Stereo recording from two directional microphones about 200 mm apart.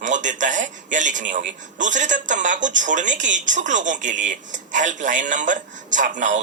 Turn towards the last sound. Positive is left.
turn(degrees=-40)  # may be behind; listen again after turning